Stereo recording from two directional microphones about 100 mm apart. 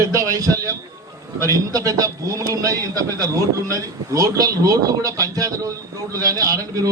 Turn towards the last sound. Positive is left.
turn(degrees=-35)  # may be behind; listen again after turning